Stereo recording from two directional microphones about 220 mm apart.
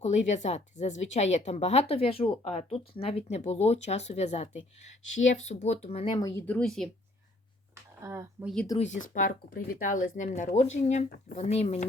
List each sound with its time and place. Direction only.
0.0 s speech: 30° left (ahead or behind)
6.1 s speech: 15° left (ahead or behind)
8.0 s speech: 15° right (ahead or behind)
8.8 s speech: 35° left (ahead or behind)